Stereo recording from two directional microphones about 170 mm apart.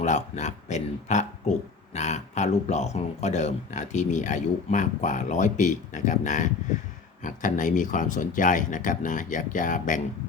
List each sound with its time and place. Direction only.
0.0 s speech: 45° left (ahead or behind)